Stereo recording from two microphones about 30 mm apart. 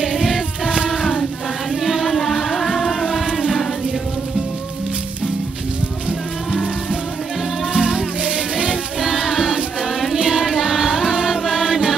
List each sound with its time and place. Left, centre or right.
0.0 s choir: centre
0.8 s a sound: centre
1.8 s music: centre
7.7 s music: right
9.0 s choir: centre
10.2 s music: centre